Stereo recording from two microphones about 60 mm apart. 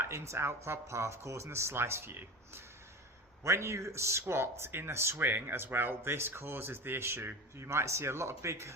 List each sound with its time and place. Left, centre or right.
0.0 s speech: right